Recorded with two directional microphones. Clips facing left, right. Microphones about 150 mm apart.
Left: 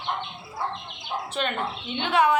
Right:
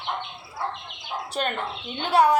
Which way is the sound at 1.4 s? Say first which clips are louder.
Right 1 dB; 40° right (ahead or behind).